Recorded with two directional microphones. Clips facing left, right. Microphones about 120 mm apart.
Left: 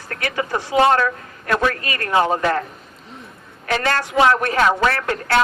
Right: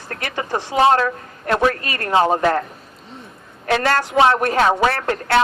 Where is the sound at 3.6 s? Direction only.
30° right (ahead or behind).